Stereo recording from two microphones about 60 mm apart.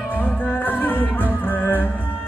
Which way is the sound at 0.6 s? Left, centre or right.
Left.